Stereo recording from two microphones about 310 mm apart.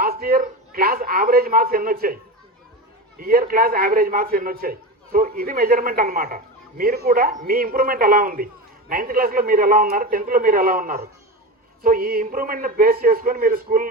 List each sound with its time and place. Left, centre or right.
0.0 s a man's voice: right
3.2 s a man's voice: right